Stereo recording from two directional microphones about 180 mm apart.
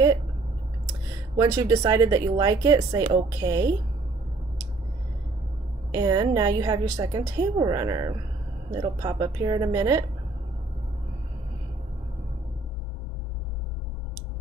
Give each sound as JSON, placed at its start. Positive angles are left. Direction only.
{"t": 1.3, "sound": "speech", "side_deg": -20}
{"t": 5.9, "sound": "speech", "side_deg": -20}